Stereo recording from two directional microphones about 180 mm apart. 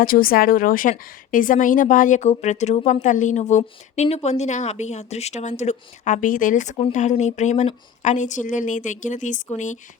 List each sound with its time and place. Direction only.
0.0 s a woman's voice: 50° left (ahead or behind)